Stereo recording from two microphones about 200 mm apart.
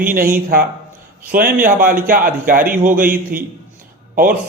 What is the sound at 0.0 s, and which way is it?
A man's voice, 45° right (ahead or behind).